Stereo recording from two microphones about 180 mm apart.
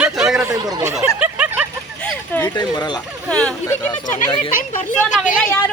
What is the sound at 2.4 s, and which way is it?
Speech, 20° left (ahead or behind).